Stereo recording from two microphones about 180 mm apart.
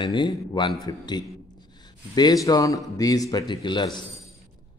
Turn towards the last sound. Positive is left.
turn(degrees=25)  # may be behind; listen again after turning